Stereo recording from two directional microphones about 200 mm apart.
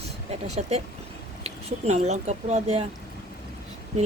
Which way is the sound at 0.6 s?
35° right (ahead or behind).